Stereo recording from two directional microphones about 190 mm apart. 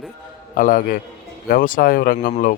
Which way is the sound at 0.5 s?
45° left (ahead or behind).